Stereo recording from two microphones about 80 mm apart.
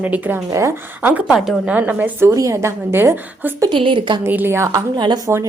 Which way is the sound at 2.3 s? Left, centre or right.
Right.